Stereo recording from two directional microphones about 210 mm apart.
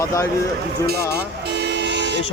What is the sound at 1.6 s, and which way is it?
Vehicle, 55° right (ahead or behind).